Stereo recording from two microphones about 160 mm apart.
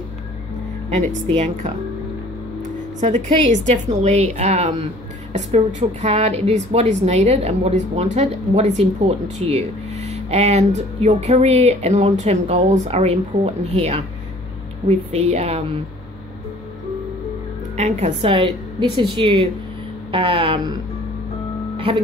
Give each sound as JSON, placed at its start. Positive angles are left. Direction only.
{"t": 0.8, "sound": "a woman's voice", "side_deg": -45}
{"t": 3.0, "sound": "a woman's voice", "side_deg": -50}
{"t": 17.7, "sound": "a woman's voice", "side_deg": -40}